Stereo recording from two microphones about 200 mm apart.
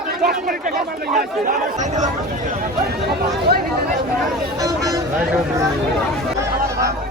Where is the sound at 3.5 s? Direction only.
50° right (ahead or behind).